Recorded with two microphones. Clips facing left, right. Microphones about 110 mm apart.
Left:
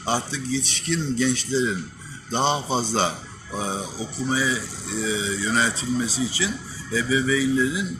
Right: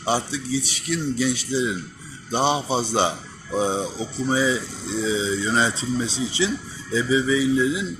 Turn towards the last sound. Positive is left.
turn(degrees=-20)  # may be behind; listen again after turning